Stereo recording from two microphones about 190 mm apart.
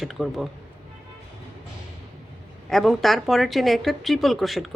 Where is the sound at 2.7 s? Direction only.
Centre (ahead or behind).